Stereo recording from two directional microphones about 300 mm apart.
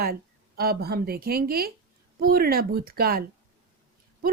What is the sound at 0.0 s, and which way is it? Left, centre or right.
Speech, right.